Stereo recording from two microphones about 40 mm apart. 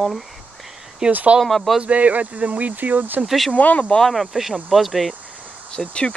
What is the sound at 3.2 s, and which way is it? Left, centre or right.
Speech, centre.